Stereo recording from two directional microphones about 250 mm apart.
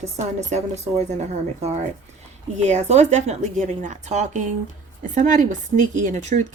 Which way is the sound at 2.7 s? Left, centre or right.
Right.